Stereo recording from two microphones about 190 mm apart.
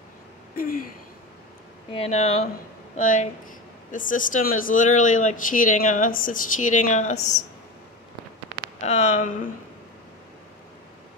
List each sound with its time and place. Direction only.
2.0 s speech: 35° left (ahead or behind)
8.8 s speech: 35° left (ahead or behind)